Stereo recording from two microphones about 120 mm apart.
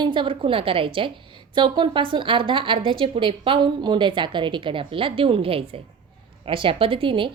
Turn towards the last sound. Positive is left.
turn(degrees=-45)  # may be behind; listen again after turning